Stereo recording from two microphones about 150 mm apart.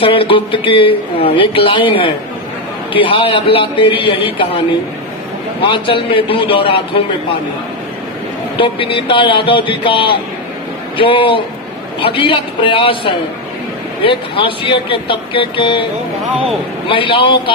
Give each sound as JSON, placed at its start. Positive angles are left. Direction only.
{"t": 0.0, "sound": "a man's voice", "side_deg": 35}
{"t": 5.6, "sound": "a man's voice", "side_deg": 35}
{"t": 8.5, "sound": "a man's voice", "side_deg": 35}
{"t": 16.9, "sound": "a man's voice", "side_deg": 35}